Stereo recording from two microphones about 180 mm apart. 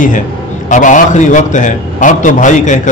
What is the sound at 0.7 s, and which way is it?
A man's voice, 45° left (ahead or behind).